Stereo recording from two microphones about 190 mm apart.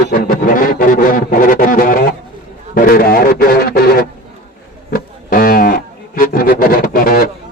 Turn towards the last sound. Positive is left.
turn(degrees=50)  # may be behind; listen again after turning